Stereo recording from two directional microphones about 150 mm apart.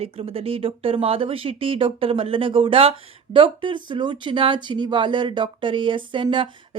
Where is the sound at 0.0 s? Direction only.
40° right (ahead or behind).